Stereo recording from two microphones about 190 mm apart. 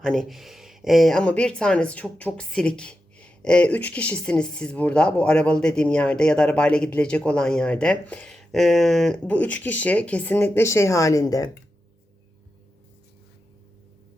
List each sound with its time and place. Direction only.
0.0 s speech: centre (ahead or behind); by 11.5 s 20° left (ahead or behind)